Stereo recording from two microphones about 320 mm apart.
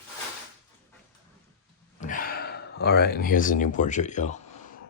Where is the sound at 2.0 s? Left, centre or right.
Left.